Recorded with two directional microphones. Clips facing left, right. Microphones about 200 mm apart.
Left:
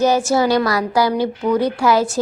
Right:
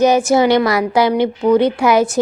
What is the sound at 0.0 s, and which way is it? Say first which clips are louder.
A woman's voice: right 3 dB; 20° right (ahead or behind).